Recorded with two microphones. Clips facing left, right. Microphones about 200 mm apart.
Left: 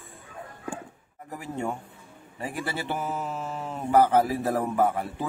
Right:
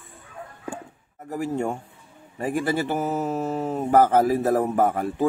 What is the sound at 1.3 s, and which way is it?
Speech, 45° right (ahead or behind).